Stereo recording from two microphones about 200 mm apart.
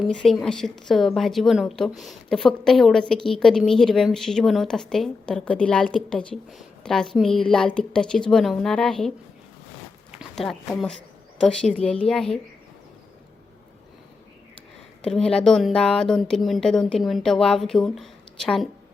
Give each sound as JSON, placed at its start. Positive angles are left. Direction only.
{"t": 0.0, "sound": "a woman's voice", "side_deg": 5}
{"t": 10.2, "sound": "a woman's voice", "side_deg": 0}
{"t": 15.0, "sound": "a woman's voice", "side_deg": 5}